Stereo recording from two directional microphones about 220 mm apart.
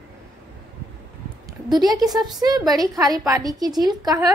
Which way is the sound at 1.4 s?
20° right (ahead or behind).